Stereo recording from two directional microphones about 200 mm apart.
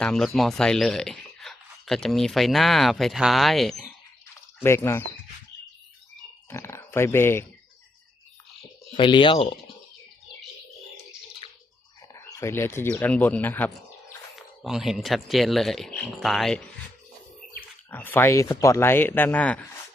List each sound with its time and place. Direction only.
0.0 s speech: centre (ahead or behind)
4.6 s speech: 10° left (ahead or behind)
6.5 s speech: 15° left (ahead or behind)
9.0 s speech: 25° left (ahead or behind)
11.4 s bathtub: 25° left (ahead or behind)
12.1 s speech: 15° left (ahead or behind)
17.9 s speech: 10° left (ahead or behind)